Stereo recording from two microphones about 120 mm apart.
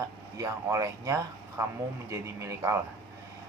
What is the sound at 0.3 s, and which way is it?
A man's voice, 25° right (ahead or behind).